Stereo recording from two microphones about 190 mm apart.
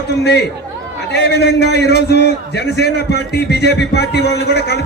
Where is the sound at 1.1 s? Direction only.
60° left (ahead or behind).